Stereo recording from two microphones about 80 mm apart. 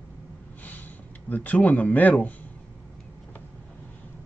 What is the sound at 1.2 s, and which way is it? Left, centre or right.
Speech, left.